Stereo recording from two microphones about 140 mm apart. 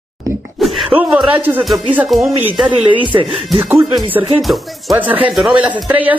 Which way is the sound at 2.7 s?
35° right (ahead or behind).